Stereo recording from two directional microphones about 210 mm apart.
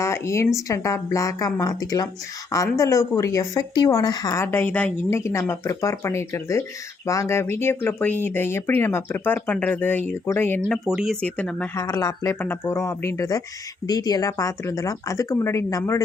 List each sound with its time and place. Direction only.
0.0 s speech: 15° left (ahead or behind)
10.8 s speech: centre (ahead or behind); by 16.0 s 15° left (ahead or behind)